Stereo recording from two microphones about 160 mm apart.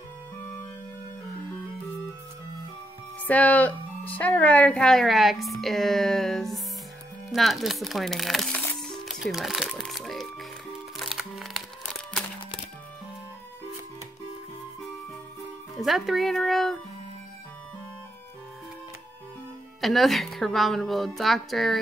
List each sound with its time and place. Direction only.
3.2 s speech: 10° left (ahead or behind)
11.0 s music: centre (ahead or behind)
15.8 s speech: centre (ahead or behind)
19.8 s speech: centre (ahead or behind)